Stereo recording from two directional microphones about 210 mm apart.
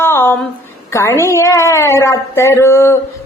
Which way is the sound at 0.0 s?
10° left (ahead or behind).